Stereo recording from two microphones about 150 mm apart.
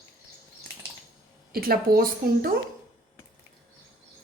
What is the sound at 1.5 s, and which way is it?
A woman's voice, 80° right.